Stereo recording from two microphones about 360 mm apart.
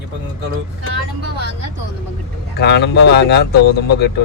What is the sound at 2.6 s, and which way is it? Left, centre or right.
Speech, left.